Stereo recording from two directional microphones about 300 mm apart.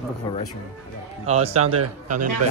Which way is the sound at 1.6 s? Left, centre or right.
Right.